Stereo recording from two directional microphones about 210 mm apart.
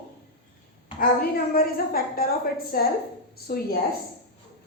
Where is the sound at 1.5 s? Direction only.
45° left (ahead or behind).